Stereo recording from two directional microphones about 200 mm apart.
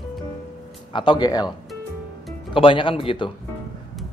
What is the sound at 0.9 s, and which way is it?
Speech, 20° left (ahead or behind).